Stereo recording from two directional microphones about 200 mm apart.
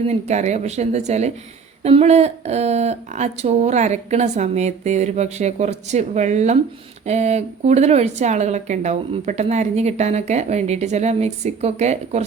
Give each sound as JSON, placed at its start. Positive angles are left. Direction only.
{"t": 0.1, "sound": "speech", "side_deg": -35}